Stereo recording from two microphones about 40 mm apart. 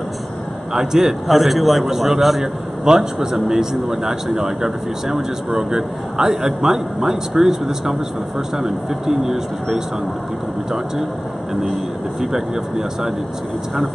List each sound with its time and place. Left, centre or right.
0.7 s a man's voice: centre
12.2 s speech: centre